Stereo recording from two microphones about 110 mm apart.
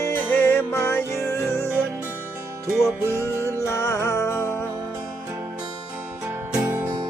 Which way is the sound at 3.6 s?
25° left (ahead or behind).